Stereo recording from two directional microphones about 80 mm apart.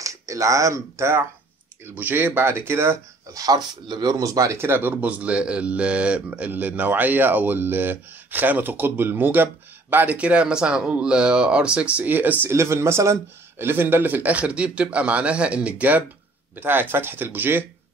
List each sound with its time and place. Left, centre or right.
0.0 s speech: right
1.9 s speech: right
3.3 s speech: right
4.6 s speech: right
12.5 s speech: right